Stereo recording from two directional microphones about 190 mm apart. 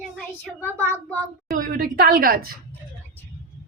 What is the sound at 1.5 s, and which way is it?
Speech, 50° right (ahead or behind).